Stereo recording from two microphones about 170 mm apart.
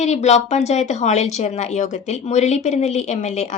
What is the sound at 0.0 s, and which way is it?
Speech, 40° left (ahead or behind).